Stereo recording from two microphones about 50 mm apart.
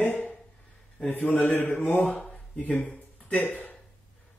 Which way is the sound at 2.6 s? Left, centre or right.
Left.